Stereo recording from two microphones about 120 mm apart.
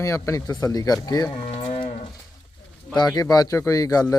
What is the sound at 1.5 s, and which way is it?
Moo, 60° left (ahead or behind).